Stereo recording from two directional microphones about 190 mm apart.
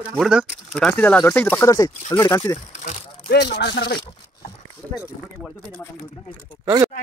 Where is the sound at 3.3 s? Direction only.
60° left (ahead or behind).